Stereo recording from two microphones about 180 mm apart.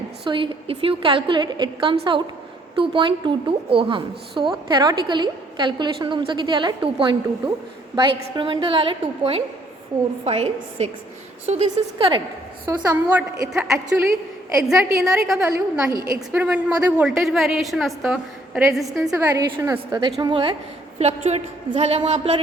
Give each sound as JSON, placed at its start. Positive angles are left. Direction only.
{"t": 0.3, "sound": "a woman's voice", "side_deg": -25}
{"t": 12.6, "sound": "a woman's voice", "side_deg": -10}
{"t": 19.1, "sound": "a woman's voice", "side_deg": -15}
{"t": 21.0, "sound": "a woman's voice", "side_deg": -35}